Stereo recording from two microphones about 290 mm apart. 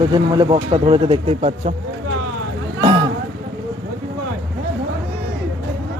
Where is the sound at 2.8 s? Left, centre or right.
Centre.